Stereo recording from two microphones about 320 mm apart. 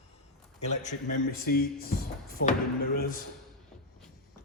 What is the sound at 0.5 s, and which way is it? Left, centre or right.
A man's voice, left.